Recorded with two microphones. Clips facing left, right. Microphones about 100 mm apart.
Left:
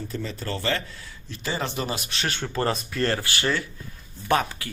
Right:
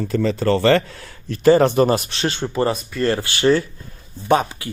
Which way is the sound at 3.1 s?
25° right (ahead or behind).